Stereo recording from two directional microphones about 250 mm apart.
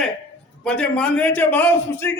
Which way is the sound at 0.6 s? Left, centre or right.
Centre.